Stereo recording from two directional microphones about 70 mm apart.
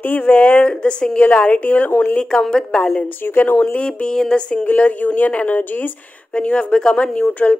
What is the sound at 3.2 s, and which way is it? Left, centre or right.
Speech, left.